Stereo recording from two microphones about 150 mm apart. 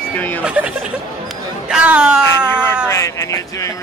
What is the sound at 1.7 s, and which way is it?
Speech, 5° right (ahead or behind).